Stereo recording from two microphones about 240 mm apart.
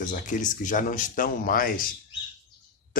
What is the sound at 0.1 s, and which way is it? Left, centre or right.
Speech, left.